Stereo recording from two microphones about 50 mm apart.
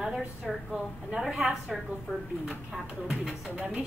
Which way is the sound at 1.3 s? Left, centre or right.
Centre.